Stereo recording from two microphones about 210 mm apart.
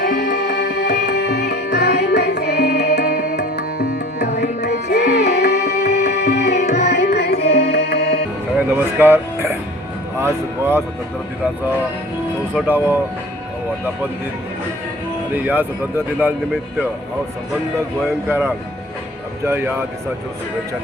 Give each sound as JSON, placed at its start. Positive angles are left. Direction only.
{"t": 0.0, "sound": "music", "side_deg": 55}
{"t": 3.9, "sound": "tabla", "side_deg": 55}
{"t": 6.1, "sound": "music", "side_deg": 50}
{"t": 8.5, "sound": "music", "side_deg": -10}
{"t": 10.2, "sound": "speech", "side_deg": -10}
{"t": 12.5, "sound": "speech", "side_deg": -10}
{"t": 15.3, "sound": "speech", "side_deg": -10}
{"t": 18.3, "sound": "speech", "side_deg": -10}